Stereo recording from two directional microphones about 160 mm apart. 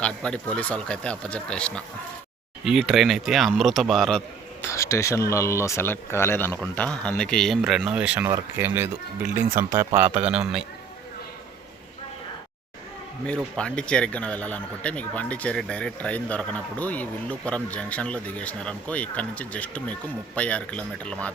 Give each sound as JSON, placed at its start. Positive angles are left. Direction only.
{"t": 0.0, "sound": "speech", "side_deg": 5}
{"t": 4.7, "sound": "speech", "side_deg": 20}
{"t": 13.2, "sound": "speech", "side_deg": 5}